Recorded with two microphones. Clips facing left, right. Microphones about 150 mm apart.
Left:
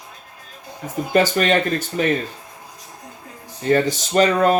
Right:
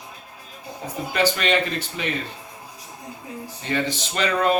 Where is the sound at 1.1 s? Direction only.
45° left (ahead or behind).